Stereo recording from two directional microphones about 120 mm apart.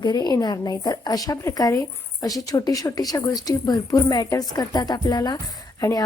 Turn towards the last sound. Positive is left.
turn(degrees=30)  # may be behind; listen again after turning